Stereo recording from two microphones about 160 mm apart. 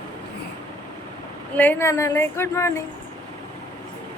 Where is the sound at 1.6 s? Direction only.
15° left (ahead or behind).